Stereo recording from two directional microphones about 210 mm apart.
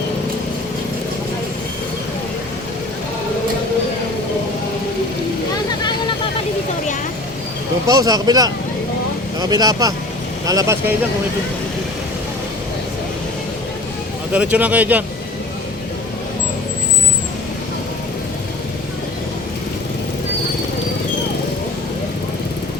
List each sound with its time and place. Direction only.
7.9 s speech: 20° right (ahead or behind)
14.3 s speech: 5° right (ahead or behind)